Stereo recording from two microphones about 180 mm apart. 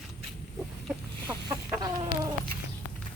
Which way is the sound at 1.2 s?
20° right (ahead or behind).